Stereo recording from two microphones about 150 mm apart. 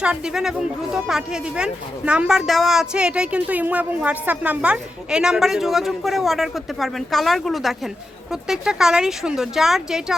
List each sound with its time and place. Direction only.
0.0 s speech: 5° right (ahead or behind)